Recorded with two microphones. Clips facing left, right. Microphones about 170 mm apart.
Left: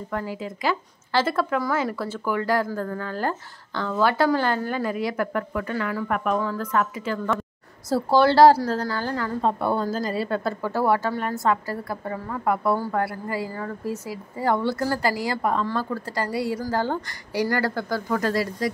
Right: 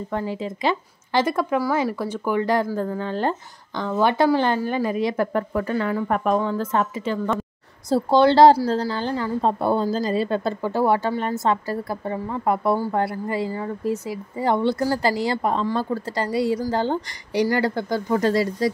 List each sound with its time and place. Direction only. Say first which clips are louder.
0.1 s speech: right 2 dB; 25° right (ahead or behind)
9.4 s a woman's voice: right 2 dB; 30° right (ahead or behind)